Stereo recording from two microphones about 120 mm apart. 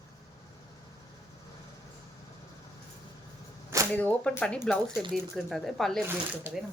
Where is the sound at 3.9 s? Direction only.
15° left (ahead or behind).